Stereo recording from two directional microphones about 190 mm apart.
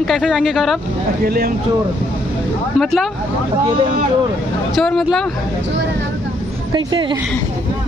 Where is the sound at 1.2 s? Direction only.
50° right (ahead or behind).